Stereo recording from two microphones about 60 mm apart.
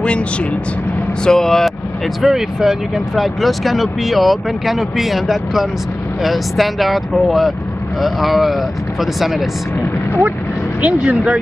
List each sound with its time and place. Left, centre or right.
1.2 s speech: centre
2.2 s speech: centre
10.8 s speech: centre